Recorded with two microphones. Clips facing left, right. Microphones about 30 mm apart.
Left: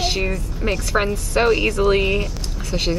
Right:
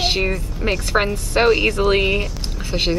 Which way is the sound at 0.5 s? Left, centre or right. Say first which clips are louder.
Even; centre.